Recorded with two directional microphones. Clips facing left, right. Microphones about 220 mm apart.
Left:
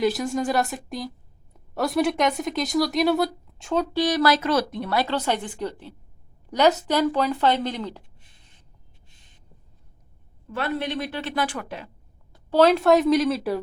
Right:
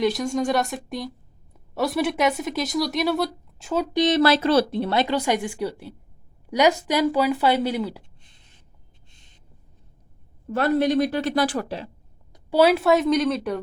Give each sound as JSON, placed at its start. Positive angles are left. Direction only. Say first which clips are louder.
{"t": 0.0, "sound": "speech", "louder": "right 1 dB", "side_deg": 0}
{"t": 3.9, "sound": "speech", "louder": "right 4 dB", "side_deg": -20}
{"t": 5.0, "sound": "speech", "louder": "right 3 dB", "side_deg": -10}
{"t": 10.5, "sound": "a woman's voice", "louder": "right 7 dB", "side_deg": -40}
{"t": 12.3, "sound": "speech", "louder": "even", "side_deg": -10}